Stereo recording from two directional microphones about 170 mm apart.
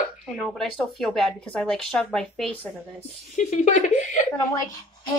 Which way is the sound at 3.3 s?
45° left (ahead or behind).